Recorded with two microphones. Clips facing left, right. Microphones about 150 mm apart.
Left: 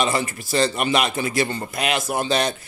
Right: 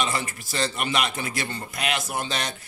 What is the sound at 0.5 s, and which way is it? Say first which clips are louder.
Speech: left 7 dB; 30° left (ahead or behind).